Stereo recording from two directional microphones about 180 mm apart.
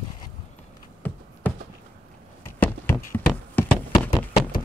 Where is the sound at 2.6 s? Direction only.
10° left (ahead or behind).